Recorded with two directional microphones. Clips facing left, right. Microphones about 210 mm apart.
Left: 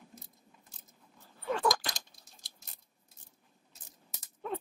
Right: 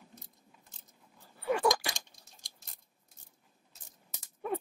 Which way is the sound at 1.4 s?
10° right (ahead or behind).